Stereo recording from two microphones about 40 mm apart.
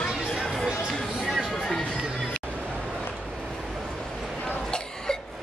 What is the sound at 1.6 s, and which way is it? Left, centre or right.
Music, centre.